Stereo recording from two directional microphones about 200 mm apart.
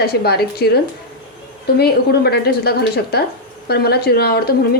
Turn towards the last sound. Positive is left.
turn(degrees=50)  # may be behind; listen again after turning